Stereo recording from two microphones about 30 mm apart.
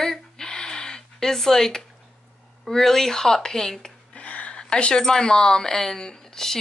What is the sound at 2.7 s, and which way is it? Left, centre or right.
Speech, centre.